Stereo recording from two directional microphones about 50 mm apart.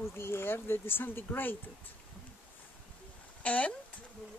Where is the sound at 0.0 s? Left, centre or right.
Left.